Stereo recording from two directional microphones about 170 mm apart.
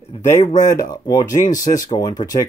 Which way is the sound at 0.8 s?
25° left (ahead or behind).